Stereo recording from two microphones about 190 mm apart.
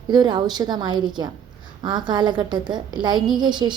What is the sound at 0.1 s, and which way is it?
A woman's voice, 25° right (ahead or behind).